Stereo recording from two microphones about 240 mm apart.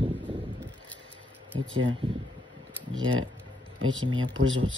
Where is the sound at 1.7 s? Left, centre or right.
Right.